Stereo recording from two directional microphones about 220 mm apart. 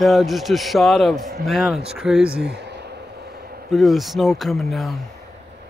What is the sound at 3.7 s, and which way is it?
Speech, centre (ahead or behind).